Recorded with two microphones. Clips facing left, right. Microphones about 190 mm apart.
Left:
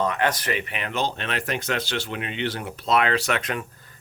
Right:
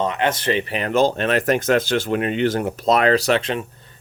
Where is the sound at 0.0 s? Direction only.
20° right (ahead or behind).